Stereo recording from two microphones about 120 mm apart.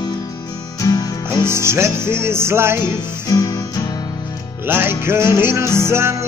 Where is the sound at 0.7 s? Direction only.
30° left (ahead or behind).